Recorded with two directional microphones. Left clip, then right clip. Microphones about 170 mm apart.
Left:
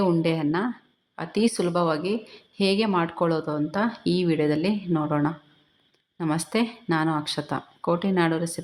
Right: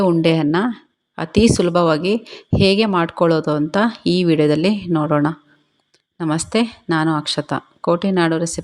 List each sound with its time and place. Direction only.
0.0 s speech: 35° right (ahead or behind)